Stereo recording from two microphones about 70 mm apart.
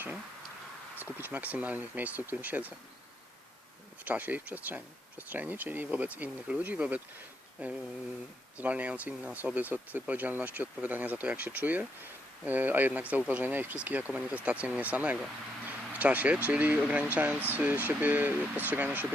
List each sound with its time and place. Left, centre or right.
0.9 s speech: right
4.0 s speech: right